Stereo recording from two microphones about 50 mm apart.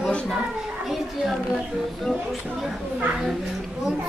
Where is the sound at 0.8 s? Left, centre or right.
Centre.